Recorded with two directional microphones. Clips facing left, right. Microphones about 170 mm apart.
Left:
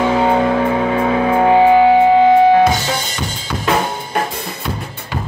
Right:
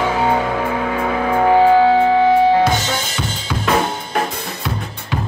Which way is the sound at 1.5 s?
15° left (ahead or behind).